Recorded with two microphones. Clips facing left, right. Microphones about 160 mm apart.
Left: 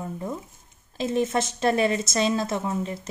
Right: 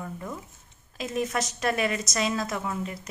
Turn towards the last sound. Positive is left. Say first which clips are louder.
# left 4 dB
turn(degrees=25)  # may be behind; listen again after turning